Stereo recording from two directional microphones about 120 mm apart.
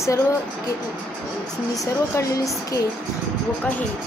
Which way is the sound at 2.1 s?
30° left (ahead or behind).